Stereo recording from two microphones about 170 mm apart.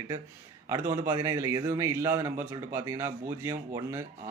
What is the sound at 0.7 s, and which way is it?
Speech, 15° right (ahead or behind).